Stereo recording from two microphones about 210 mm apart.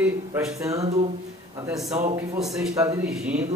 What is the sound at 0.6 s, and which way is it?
Speech, 15° right (ahead or behind).